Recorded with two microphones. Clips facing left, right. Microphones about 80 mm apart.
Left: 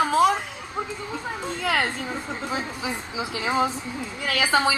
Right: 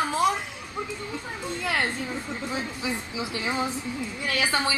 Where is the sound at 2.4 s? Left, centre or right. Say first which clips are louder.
Left 2 dB; left.